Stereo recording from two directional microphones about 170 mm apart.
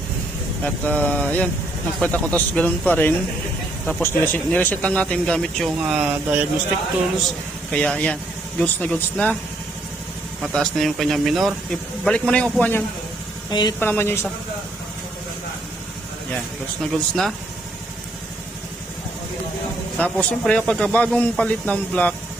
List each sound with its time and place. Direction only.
0.6 s speech: 10° left (ahead or behind)
10.5 s speech: centre (ahead or behind)
13.5 s speech: 25° left (ahead or behind)
13.7 s speech: 10° left (ahead or behind)
16.8 s speech: centre (ahead or behind)
20.0 s speech: 5° left (ahead or behind)